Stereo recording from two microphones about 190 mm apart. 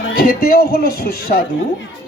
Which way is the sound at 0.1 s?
50° left (ahead or behind).